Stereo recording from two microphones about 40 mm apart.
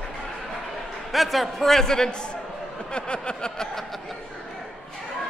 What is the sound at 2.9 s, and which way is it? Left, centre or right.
Speech, left.